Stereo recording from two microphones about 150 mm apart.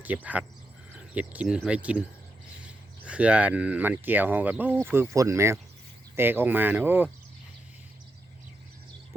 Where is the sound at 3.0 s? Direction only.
5° right (ahead or behind).